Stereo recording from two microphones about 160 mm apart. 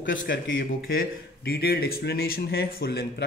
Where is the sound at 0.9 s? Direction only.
70° left (ahead or behind).